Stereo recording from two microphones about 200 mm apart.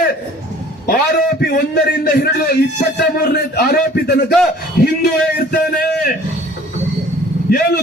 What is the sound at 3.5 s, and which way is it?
Speech, 55° left (ahead or behind).